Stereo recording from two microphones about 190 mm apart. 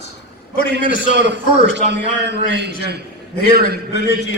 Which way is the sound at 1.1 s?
65° right (ahead or behind).